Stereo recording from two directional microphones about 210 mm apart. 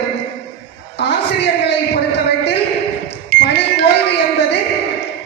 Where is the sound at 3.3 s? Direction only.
45° right (ahead or behind).